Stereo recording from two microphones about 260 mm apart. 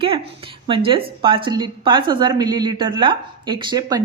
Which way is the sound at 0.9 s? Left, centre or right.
Centre.